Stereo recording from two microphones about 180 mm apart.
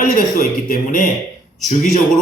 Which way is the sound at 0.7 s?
50° left (ahead or behind).